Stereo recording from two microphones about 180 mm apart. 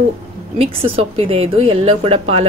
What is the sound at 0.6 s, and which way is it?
A woman's voice, 35° right (ahead or behind).